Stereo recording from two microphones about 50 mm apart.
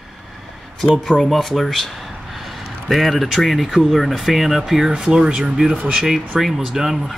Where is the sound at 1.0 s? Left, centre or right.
Centre.